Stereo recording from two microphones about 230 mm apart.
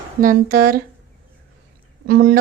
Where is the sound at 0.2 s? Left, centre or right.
Right.